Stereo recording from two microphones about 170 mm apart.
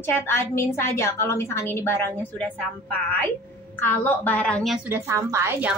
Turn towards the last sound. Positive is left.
turn(degrees=-15)  # may be behind; listen again after turning